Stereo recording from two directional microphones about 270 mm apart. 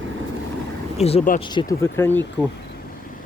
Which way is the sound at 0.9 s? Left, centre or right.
Left.